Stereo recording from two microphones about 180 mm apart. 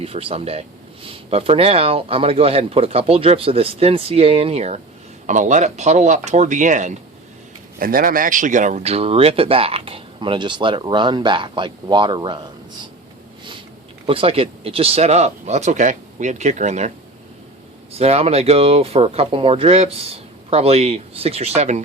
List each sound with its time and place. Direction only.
0.0 s speech: 35° right (ahead or behind)
14.1 s speech: 30° right (ahead or behind)
17.9 s speech: 35° right (ahead or behind)